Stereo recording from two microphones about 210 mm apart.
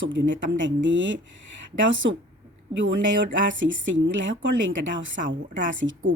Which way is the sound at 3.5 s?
60° right (ahead or behind).